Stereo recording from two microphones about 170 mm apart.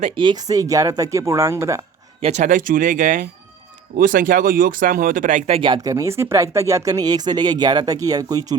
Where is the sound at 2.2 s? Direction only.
45° right (ahead or behind).